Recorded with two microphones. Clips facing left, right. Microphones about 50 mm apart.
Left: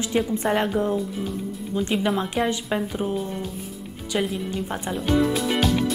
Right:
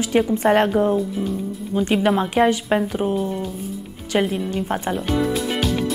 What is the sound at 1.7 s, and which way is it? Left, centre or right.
Speech, right.